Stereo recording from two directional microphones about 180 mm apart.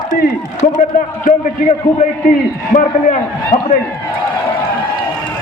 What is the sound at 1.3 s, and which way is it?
Speech, 45° left (ahead or behind).